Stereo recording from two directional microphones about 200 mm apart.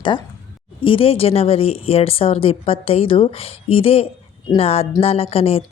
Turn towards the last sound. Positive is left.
turn(degrees=30)  # may be behind; listen again after turning